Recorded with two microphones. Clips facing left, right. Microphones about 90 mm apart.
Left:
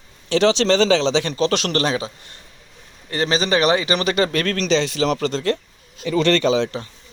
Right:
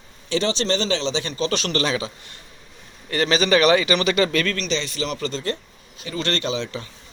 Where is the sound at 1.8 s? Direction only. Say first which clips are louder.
Left 2 dB; 40° left (ahead or behind).